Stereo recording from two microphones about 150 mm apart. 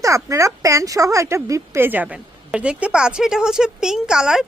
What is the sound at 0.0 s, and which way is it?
Speech, 20° right (ahead or behind).